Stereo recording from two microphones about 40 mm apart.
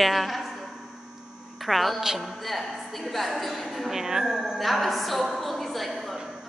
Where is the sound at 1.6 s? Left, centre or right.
Centre.